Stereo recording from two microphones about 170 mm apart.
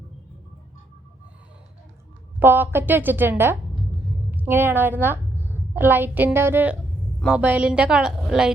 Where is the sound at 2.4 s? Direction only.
10° right (ahead or behind).